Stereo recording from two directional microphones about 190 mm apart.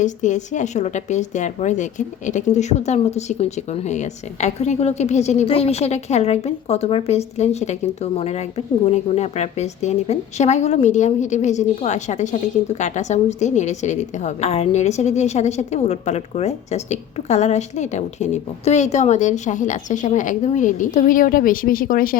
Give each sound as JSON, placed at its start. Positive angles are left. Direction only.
{"t": 0.0, "sound": "a woman's voice", "side_deg": 40}